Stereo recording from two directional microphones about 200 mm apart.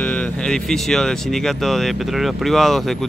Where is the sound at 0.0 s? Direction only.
5° left (ahead or behind).